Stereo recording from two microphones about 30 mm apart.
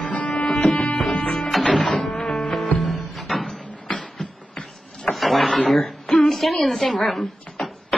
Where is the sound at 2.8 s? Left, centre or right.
Centre.